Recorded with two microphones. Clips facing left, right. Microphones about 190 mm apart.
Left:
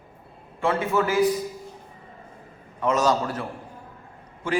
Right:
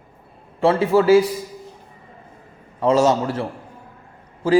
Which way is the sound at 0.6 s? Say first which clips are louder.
Right 7 dB; 30° right (ahead or behind).